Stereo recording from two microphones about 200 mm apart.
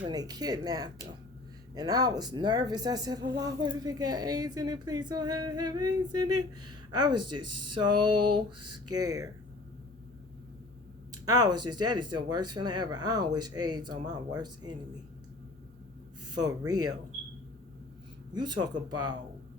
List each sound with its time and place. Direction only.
0.1 s speech: 20° right (ahead or behind)
11.1 s speech: 20° right (ahead or behind)
16.3 s speech: 20° right (ahead or behind)
18.3 s speech: 20° right (ahead or behind)